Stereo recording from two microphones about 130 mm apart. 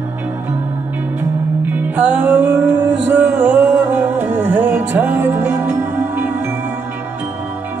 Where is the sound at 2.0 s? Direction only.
15° right (ahead or behind).